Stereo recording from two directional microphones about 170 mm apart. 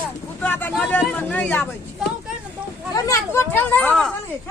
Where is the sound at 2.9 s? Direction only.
15° left (ahead or behind).